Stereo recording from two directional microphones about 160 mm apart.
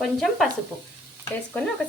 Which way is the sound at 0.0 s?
5° left (ahead or behind).